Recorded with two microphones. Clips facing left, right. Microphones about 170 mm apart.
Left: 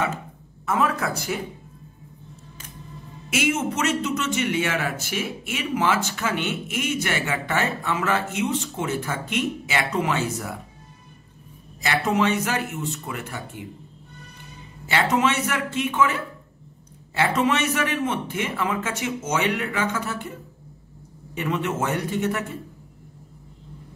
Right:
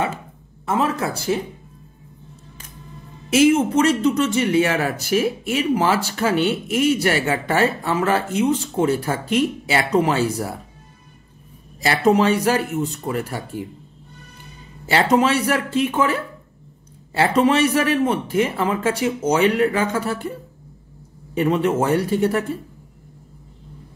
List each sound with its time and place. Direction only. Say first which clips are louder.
0.7 s speech: right 2 dB; 30° right (ahead or behind)
3.3 s speech: right 9 dB; 35° right (ahead or behind)
11.8 s speech: right 6 dB; 35° right (ahead or behind)
14.9 s speech: right 5 dB; 35° right (ahead or behind)
21.4 s speech: right 7 dB; 35° right (ahead or behind)